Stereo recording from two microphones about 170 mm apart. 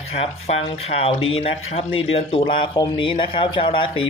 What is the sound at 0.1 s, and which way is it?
Speech, 40° left (ahead or behind).